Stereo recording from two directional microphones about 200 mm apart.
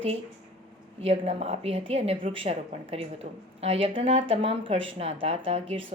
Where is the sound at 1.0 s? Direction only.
30° right (ahead or behind).